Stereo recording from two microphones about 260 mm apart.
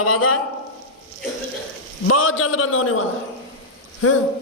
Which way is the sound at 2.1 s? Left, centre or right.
Left.